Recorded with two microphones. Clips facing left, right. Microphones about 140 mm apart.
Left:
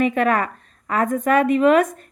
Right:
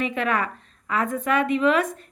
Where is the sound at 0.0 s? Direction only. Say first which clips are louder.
Left 6 dB; 45° left (ahead or behind).